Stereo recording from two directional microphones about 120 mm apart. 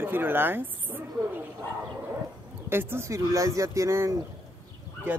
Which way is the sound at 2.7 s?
20° right (ahead or behind).